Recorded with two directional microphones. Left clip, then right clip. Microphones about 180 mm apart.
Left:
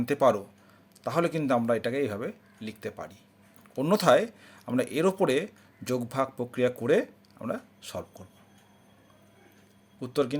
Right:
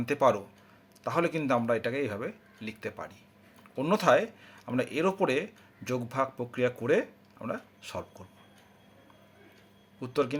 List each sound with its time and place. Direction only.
0.0 s speech: 25° left (ahead or behind)
10.0 s speech: 20° left (ahead or behind)